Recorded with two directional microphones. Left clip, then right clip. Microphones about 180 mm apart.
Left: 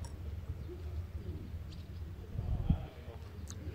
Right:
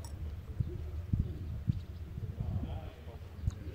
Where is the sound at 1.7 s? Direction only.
50° left (ahead or behind).